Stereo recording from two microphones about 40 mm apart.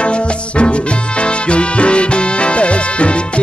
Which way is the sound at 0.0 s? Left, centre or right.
Left.